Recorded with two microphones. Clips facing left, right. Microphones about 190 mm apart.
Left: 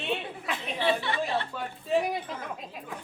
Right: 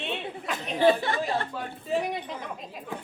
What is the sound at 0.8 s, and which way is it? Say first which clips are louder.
Speech: right 6 dB; 45° right (ahead or behind).